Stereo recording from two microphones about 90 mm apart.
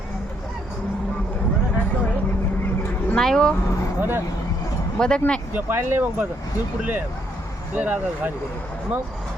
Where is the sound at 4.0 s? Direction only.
25° right (ahead or behind).